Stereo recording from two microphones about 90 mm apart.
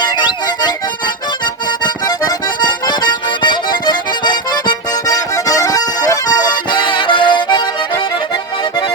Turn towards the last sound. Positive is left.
turn(degrees=60)  # may be behind; listen again after turning